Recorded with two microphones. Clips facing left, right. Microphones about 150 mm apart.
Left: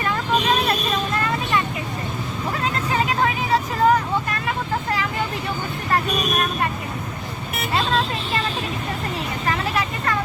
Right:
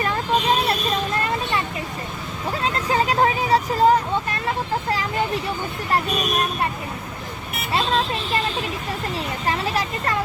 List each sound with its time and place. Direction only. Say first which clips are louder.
2.9 s vehicle: right 3 dB; 35° right (ahead or behind)
9.5 s vehicle: even; 30° right (ahead or behind)